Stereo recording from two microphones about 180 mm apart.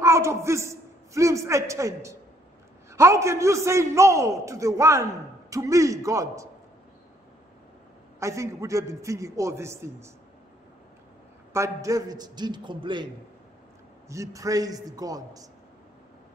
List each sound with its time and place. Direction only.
0.0 s a woman's voice: 15° right (ahead or behind)
8.2 s a man's voice: 15° right (ahead or behind)
11.5 s a man's voice: 15° right (ahead or behind)